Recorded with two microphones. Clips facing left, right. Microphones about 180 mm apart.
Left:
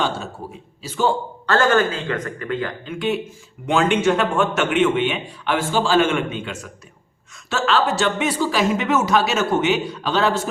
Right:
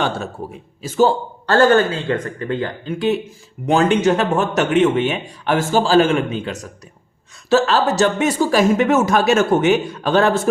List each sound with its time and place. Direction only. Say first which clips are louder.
0.8 s a man's voice: right 5 dB; 45° right (ahead or behind)